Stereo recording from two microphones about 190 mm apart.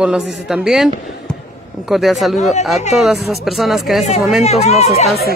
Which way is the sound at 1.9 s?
Centre (ahead or behind).